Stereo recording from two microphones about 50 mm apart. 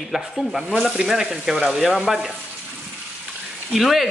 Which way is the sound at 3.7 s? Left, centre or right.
Centre.